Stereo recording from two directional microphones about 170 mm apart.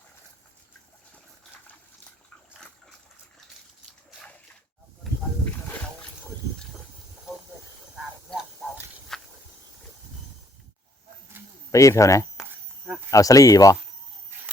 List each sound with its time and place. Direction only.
2.5 s water: centre (ahead or behind)
9.1 s a sound: centre (ahead or behind)
11.7 s speech: 20° left (ahead or behind)